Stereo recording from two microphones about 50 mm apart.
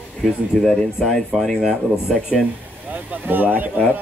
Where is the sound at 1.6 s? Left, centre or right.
Centre.